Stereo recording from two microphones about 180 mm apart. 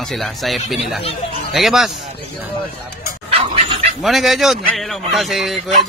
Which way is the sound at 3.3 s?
30° right (ahead or behind).